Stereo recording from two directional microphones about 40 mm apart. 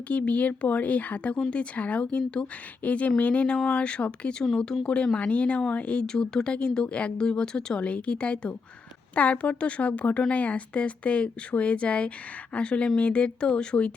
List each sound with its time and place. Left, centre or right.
0.1 s speech: left
3.7 s speech: left
5.1 s speech: left
6.1 s speech: centre
7.8 s speech: left